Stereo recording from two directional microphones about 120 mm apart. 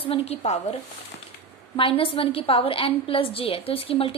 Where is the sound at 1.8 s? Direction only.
50° left (ahead or behind).